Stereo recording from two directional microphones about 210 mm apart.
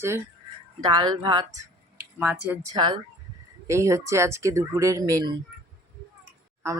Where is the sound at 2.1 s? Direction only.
10° right (ahead or behind).